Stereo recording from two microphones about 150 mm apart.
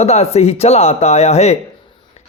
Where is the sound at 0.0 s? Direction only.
45° left (ahead or behind).